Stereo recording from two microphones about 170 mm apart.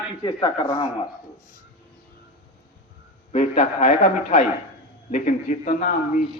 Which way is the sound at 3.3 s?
40° left (ahead or behind).